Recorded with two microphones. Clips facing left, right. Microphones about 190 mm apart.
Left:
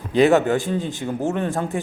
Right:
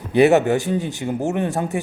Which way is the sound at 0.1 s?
15° right (ahead or behind).